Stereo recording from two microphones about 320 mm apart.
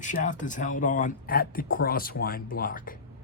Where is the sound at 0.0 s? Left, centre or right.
Left.